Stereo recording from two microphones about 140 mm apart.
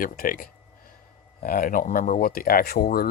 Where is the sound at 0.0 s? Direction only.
85° left.